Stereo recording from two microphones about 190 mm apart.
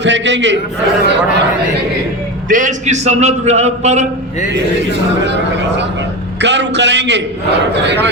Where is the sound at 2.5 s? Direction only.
40° right (ahead or behind).